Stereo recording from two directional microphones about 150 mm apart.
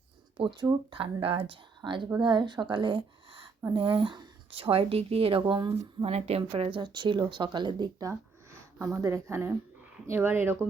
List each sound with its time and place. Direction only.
0.3 s speech: 35° right (ahead or behind)
6.1 s speech: 45° right (ahead or behind); by 10.6 s 15° right (ahead or behind)